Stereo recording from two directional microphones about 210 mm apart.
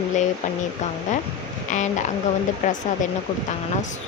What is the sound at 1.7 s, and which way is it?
Speech, 35° left (ahead or behind).